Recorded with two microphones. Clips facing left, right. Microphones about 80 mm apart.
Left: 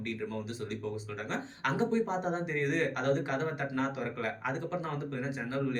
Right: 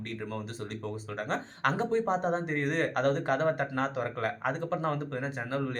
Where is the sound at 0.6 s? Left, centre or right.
Right.